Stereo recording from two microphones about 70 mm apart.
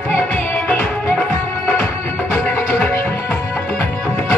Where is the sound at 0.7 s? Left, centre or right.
Left.